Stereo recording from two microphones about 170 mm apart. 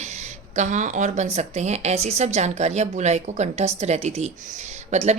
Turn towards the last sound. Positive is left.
turn(degrees=-40)  # may be behind; listen again after turning